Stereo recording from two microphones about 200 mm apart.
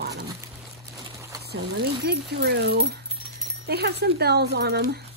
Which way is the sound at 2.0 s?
55° right (ahead or behind).